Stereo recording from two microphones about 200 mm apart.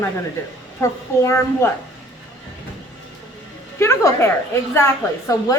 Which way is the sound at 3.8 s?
15° left (ahead or behind).